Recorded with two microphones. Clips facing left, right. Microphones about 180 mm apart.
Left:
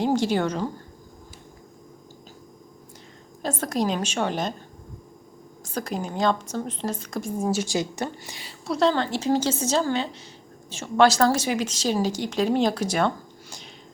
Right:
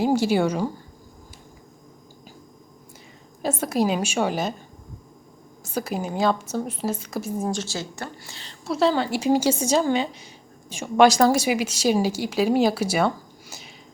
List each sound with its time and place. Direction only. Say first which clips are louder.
0.0 s a woman's voice: right 2 dB; 10° right (ahead or behind)
3.4 s a woman's voice: right 3 dB; 5° right (ahead or behind)
5.7 s a woman's voice: right 2 dB; 5° right (ahead or behind)
7.6 s speech: left 5 dB; 15° left (ahead or behind)
8.6 s a woman's voice: right 1 dB; 5° right (ahead or behind)